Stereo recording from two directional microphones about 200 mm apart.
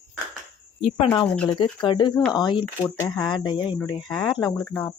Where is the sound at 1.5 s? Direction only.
25° left (ahead or behind).